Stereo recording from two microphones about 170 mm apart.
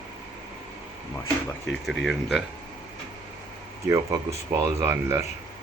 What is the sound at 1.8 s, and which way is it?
Speech, centre (ahead or behind).